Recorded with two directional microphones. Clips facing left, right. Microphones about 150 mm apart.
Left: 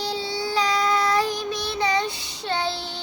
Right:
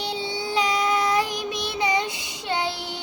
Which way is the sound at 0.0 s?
20° right (ahead or behind).